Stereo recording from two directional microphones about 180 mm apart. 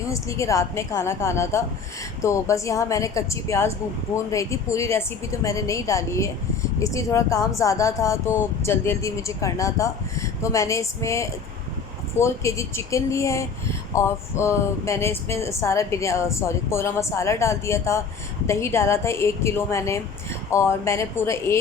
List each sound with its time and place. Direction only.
0.1 s speech: 15° left (ahead or behind)